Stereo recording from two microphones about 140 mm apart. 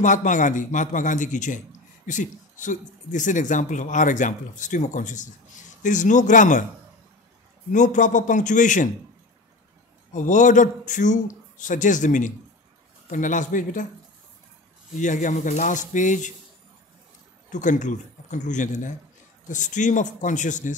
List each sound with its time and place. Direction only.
0.0 s speech: 65° left (ahead or behind)
7.7 s speech: 65° left (ahead or behind)
10.1 s speech: 65° left (ahead or behind)
15.0 s speech: 60° left (ahead or behind)
17.5 s speech: 60° left (ahead or behind)